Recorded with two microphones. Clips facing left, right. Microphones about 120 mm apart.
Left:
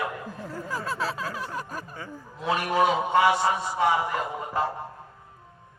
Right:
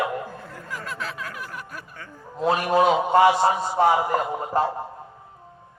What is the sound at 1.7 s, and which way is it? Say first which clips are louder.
Music: left 3 dB; 40° left (ahead or behind).